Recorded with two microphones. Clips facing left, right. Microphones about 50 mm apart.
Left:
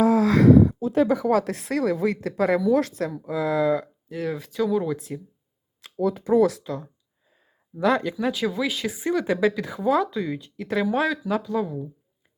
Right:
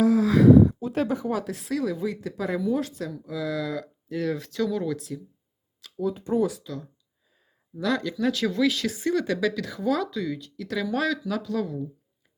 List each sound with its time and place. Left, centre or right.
0.0 s a sound: left
0.3 s a sound: left
1.2 s speech: left
2.5 s speech: left
2.9 s speech: left
4.1 s speech: centre
4.9 s speech: left
6.0 s speech: left
6.6 s speech: left; by 11.9 s centre